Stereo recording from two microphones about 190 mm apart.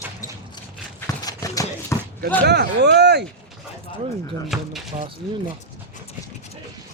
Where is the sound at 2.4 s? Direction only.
60° right (ahead or behind).